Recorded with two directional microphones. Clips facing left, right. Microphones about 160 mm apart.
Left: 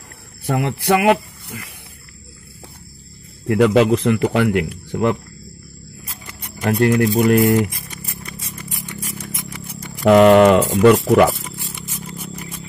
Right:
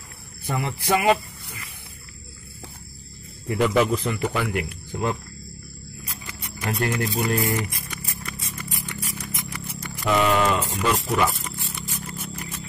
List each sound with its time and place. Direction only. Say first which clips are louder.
0.5 s speech: left 6 dB; 70° left (ahead or behind)
3.4 s speech: left 7 dB; 75° left (ahead or behind)
6.4 s speech: left 10 dB; 60° left (ahead or behind)
10.0 s speech: left 11 dB; 65° left (ahead or behind)